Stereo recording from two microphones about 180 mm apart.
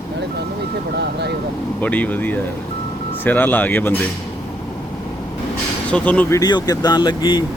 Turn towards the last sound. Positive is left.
turn(degrees=25)  # may be behind; listen again after turning